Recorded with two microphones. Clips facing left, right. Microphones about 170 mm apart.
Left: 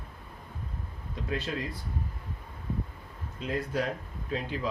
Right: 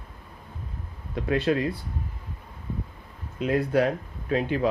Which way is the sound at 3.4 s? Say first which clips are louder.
Right 8 dB; 65° right (ahead or behind).